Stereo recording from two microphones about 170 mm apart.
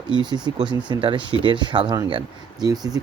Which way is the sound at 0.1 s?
25° right (ahead or behind).